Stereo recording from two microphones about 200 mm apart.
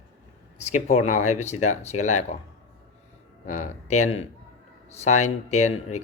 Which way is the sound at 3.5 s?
35° left (ahead or behind).